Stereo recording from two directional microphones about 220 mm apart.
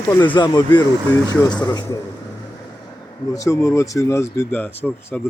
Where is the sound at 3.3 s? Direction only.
15° left (ahead or behind).